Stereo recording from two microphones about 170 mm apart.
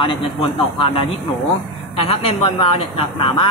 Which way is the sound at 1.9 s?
35° left (ahead or behind).